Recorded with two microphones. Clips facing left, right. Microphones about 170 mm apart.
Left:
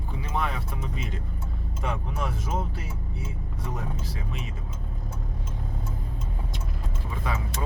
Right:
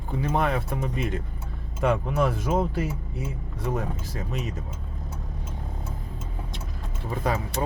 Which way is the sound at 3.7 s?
45° right (ahead or behind).